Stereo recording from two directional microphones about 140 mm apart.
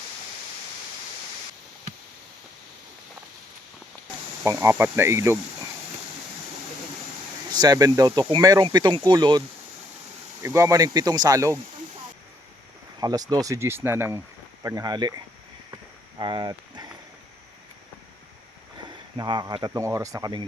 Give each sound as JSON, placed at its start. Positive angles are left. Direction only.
{"t": 4.4, "sound": "speech", "side_deg": -15}
{"t": 7.5, "sound": "speech", "side_deg": -30}
{"t": 10.4, "sound": "speech", "side_deg": -20}
{"t": 13.0, "sound": "speech", "side_deg": -30}
{"t": 15.7, "sound": "walk", "side_deg": -30}
{"t": 18.9, "sound": "speech", "side_deg": -30}